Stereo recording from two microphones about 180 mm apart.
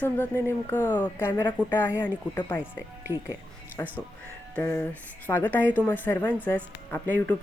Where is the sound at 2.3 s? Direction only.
10° left (ahead or behind).